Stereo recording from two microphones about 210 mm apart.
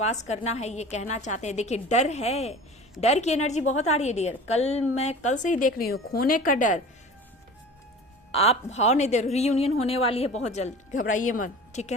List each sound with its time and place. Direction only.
0.0 s a woman's voice: 30° left (ahead or behind)
8.3 s a woman's voice: 30° left (ahead or behind)